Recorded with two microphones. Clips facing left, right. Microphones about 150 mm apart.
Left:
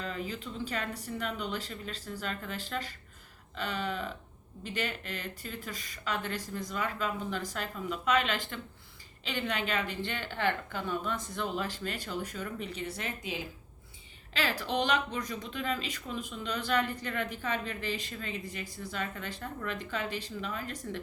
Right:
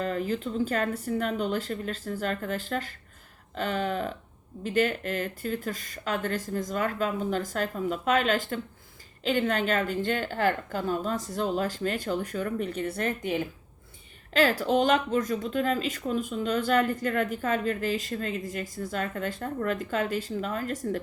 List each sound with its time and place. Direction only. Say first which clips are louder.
0.0 s speech: right 8 dB; 45° right (ahead or behind)